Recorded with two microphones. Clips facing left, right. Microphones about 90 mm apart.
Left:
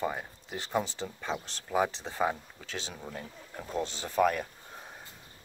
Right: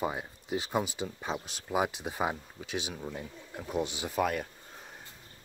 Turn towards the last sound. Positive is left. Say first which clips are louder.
# left 3 dB
turn(degrees=-5)  # may be behind; listen again after turning